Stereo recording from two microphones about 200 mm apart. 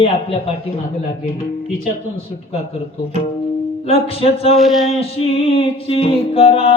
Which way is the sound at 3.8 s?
30° left (ahead or behind).